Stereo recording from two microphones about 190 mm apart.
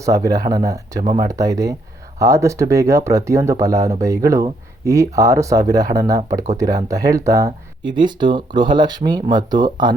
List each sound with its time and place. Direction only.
0.0 s speech: 20° right (ahead or behind)